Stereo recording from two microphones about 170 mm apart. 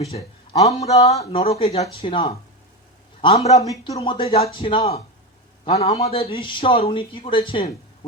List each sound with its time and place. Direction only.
0.6 s a man's voice: 40° left (ahead or behind)
3.6 s speech: 20° left (ahead or behind)
3.9 s speech: 30° left (ahead or behind)